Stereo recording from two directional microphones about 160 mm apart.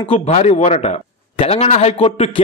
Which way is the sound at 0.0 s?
40° left (ahead or behind).